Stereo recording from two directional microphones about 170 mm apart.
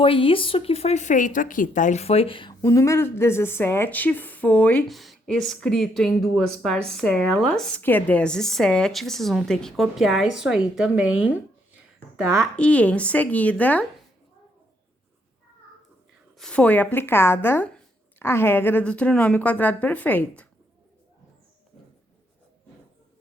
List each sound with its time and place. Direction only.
0.0 s a woman's voice: 30° left (ahead or behind)
2.6 s a woman's voice: 20° left (ahead or behind); by 11.3 s 10° right (ahead or behind)
12.4 s a woman's voice: 5° left (ahead or behind)
16.4 s a woman's voice: 5° left (ahead or behind)